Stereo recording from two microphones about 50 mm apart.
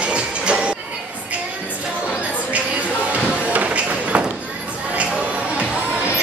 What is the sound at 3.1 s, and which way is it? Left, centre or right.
Music, right.